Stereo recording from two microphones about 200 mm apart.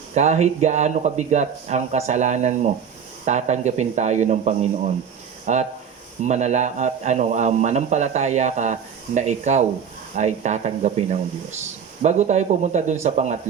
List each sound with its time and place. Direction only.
0.1 s a man's voice: 35° right (ahead or behind)